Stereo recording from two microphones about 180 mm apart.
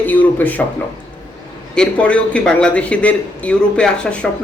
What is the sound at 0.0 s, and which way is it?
Speech, 10° left (ahead or behind).